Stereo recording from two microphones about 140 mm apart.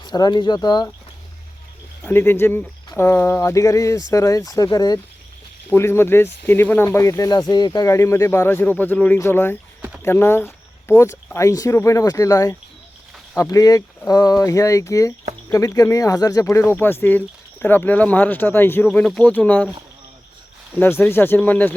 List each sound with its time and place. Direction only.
0.0 s speech: 30° left (ahead or behind)
2.0 s speech: 15° left (ahead or behind)
5.7 s speech: 15° left (ahead or behind)
20.7 s speech: 15° left (ahead or behind)